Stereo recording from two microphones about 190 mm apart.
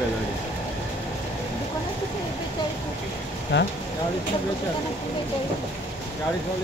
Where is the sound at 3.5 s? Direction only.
70° left (ahead or behind).